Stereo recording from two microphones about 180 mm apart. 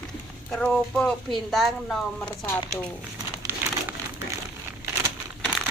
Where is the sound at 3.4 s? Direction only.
15° right (ahead or behind).